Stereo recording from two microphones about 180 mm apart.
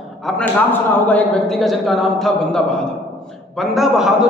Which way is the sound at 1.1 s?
5° left (ahead or behind).